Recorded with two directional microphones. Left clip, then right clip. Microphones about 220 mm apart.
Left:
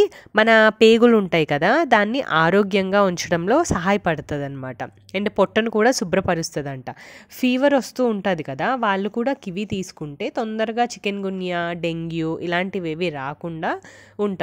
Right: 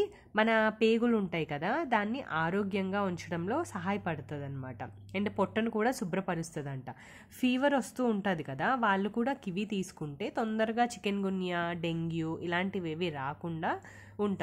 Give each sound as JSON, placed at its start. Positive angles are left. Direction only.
{"t": 0.0, "sound": "speech", "side_deg": 45}